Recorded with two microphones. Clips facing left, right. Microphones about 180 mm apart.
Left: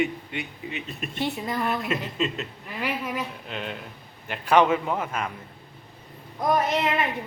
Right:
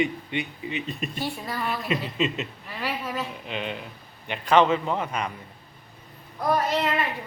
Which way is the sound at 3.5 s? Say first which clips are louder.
Right 2 dB; centre (ahead or behind).